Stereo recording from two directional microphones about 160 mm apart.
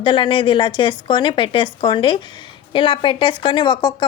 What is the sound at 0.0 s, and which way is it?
Speech, 30° left (ahead or behind).